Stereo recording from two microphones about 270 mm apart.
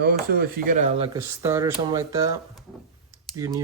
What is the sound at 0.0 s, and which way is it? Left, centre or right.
Speech, right.